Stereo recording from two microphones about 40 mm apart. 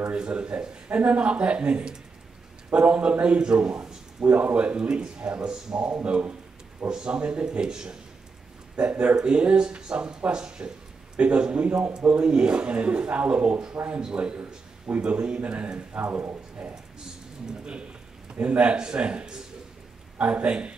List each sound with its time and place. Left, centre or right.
0.1 s a man's voice: right
4.2 s a man's voice: right; by 5.9 s centre
5.9 s a man's voice: right
6.9 s a man's voice: right
8.7 s a man's voice: right
15.9 s speech: right
18.3 s a man's voice: right